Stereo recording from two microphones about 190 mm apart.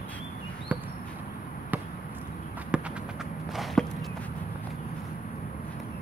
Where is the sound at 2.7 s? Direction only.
5° right (ahead or behind).